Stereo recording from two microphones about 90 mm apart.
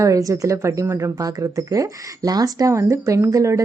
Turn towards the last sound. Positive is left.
turn(degrees=-35)  # may be behind; listen again after turning